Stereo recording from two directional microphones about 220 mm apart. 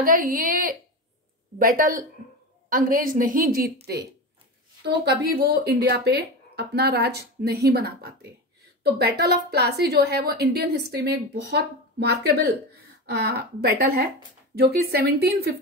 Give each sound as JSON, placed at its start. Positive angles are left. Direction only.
{"t": 0.0, "sound": "a woman's voice", "side_deg": -40}
{"t": 4.8, "sound": "a woman's voice", "side_deg": -50}